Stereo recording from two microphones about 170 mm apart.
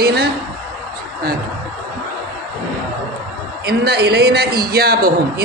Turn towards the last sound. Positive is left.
turn(degrees=-65)  # may be behind; listen again after turning